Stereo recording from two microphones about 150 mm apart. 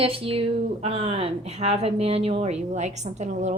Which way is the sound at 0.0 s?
35° right (ahead or behind).